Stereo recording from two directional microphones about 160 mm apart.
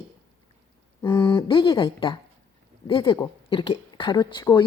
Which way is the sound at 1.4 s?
30° left (ahead or behind).